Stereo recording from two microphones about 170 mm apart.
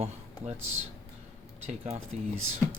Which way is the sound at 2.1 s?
40° right (ahead or behind).